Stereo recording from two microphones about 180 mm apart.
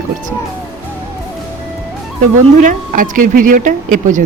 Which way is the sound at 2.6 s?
50° right (ahead or behind).